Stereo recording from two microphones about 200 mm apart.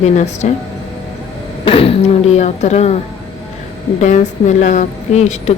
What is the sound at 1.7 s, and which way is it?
A woman's voice, 30° left (ahead or behind).